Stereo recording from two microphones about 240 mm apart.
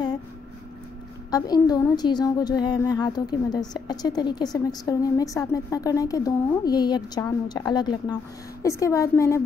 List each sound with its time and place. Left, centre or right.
1.3 s a woman's voice: centre